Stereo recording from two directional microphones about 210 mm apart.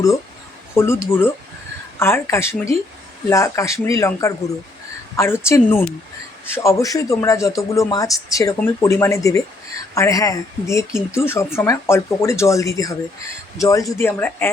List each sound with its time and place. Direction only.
0.8 s a man's voice: 10° left (ahead or behind)